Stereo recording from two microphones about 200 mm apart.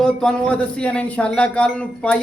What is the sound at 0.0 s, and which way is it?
Speech, 5° left (ahead or behind).